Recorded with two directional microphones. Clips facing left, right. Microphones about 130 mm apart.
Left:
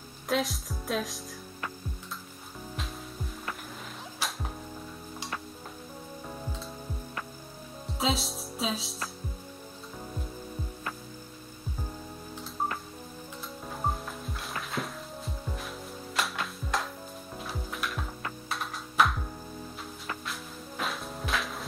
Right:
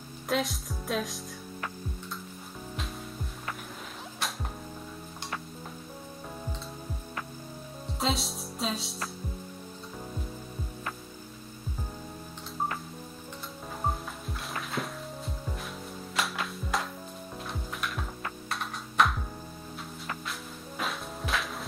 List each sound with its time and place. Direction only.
0.3 s speech: centre (ahead or behind)
4.2 s music: centre (ahead or behind)
8.0 s speech: centre (ahead or behind)
13.8 s music: centre (ahead or behind)
20.2 s music: centre (ahead or behind)